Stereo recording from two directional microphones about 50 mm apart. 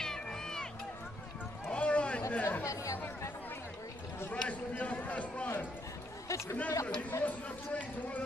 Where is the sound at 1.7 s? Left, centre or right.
Left.